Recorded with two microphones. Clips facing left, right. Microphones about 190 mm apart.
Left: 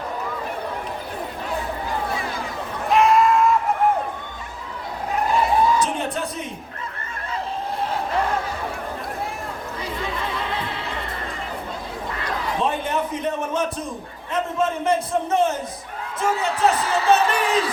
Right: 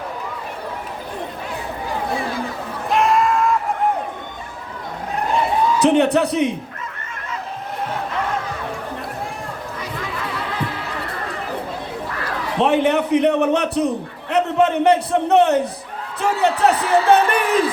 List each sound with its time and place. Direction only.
2.9 s a sound: centre (ahead or behind)
5.8 s a man's voice: 70° right (ahead or behind)
12.5 s a man's voice: 75° right (ahead or behind); by 17.6 s 55° right (ahead or behind)